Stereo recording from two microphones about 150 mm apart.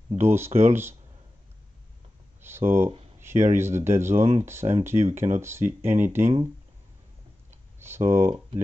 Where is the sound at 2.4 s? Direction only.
15° right (ahead or behind).